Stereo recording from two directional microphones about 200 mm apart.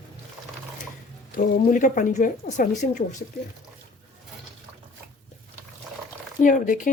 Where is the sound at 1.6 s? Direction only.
40° left (ahead or behind).